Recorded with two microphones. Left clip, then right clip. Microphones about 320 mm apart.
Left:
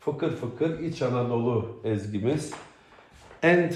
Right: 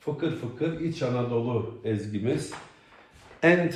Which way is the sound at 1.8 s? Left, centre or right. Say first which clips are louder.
Left 1 dB; centre.